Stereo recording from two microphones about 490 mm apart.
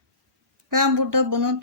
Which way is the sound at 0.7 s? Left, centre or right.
Right.